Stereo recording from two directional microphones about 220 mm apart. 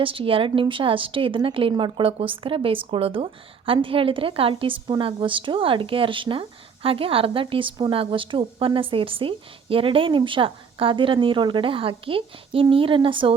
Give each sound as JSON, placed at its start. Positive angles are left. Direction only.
{"t": 0.0, "sound": "a woman's voice", "side_deg": -25}